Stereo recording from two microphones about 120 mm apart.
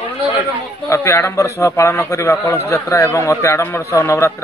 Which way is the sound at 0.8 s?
25° left (ahead or behind).